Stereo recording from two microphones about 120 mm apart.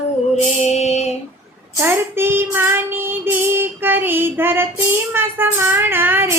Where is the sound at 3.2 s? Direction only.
20° right (ahead or behind).